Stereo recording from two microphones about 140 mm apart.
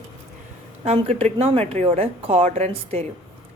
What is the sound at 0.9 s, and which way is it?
A woman's voice, 45° right (ahead or behind).